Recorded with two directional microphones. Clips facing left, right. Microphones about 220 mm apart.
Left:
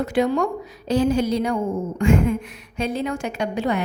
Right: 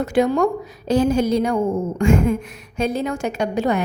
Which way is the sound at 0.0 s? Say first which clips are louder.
Right 3 dB; 45° right (ahead or behind).